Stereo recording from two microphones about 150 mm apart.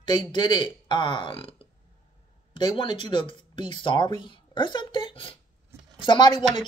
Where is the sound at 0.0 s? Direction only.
30° left (ahead or behind).